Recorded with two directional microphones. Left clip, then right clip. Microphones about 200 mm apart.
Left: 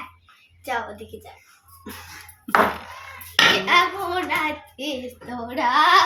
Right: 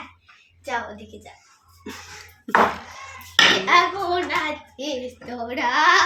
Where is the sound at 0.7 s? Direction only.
30° left (ahead or behind).